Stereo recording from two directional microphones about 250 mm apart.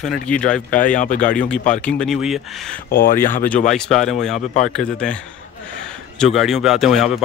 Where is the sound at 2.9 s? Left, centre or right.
Left.